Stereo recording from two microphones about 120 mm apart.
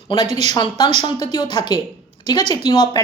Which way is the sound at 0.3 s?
65° right (ahead or behind).